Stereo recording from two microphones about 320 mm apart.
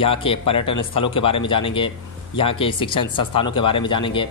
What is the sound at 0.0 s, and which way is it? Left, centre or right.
Speech, centre.